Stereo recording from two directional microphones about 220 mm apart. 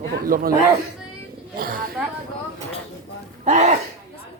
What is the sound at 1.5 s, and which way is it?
Roaring cats, 40° right (ahead or behind).